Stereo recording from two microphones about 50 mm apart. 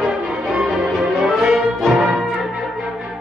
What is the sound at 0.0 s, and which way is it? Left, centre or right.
Music, right.